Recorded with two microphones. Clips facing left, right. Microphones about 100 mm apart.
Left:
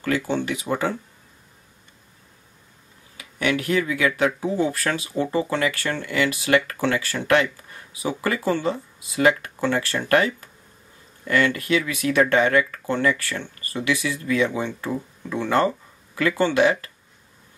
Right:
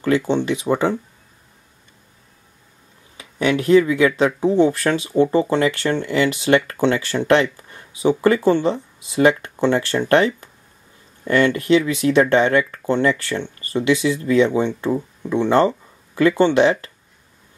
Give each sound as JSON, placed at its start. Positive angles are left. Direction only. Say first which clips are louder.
{"t": 0.0, "sound": "speech", "louder": "right 5 dB", "side_deg": -20}
{"t": 3.2, "sound": "speech", "louder": "right 4 dB", "side_deg": -25}